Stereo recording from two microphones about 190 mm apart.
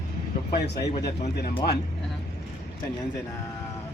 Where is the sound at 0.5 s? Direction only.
60° left (ahead or behind).